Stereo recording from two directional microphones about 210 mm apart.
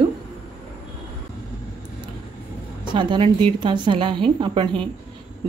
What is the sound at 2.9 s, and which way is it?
A woman's voice, 20° right (ahead or behind).